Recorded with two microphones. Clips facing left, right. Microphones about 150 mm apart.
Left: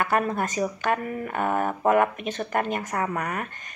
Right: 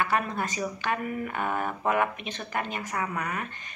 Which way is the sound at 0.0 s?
50° left (ahead or behind).